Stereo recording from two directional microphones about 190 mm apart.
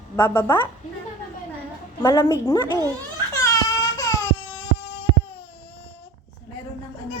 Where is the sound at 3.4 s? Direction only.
15° left (ahead or behind).